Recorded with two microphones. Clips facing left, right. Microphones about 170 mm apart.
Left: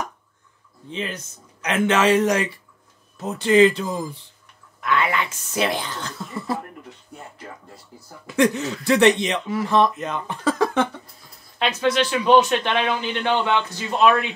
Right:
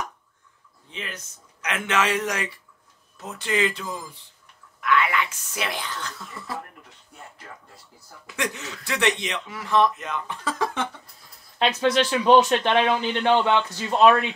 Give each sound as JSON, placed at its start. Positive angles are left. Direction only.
{"t": 0.8, "sound": "speech", "side_deg": 30}
{"t": 8.4, "sound": "speech", "side_deg": 30}
{"t": 10.6, "sound": "a sound", "side_deg": 50}
{"t": 11.5, "sound": "speech", "side_deg": -30}